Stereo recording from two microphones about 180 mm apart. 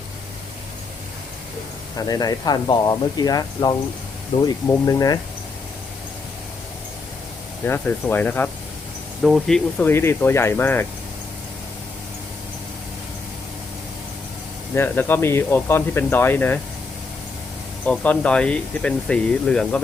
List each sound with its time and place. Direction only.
2.0 s speech: 20° left (ahead or behind)
7.6 s speech: 10° left (ahead or behind)
9.2 s speech: centre (ahead or behind)
9.7 s speech: 10° left (ahead or behind)
14.8 s speech: 10° left (ahead or behind)
17.8 s speech: 5° left (ahead or behind)